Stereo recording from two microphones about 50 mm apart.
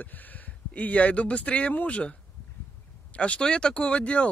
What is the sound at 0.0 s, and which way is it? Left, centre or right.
Speech, left.